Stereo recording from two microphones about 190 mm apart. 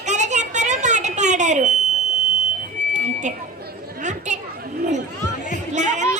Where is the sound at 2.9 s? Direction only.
40° right (ahead or behind).